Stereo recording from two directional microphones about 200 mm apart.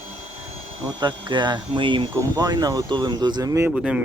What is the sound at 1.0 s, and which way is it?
Speech, 20° right (ahead or behind).